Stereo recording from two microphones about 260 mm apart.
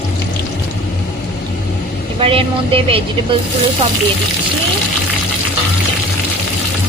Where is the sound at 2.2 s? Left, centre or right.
Right.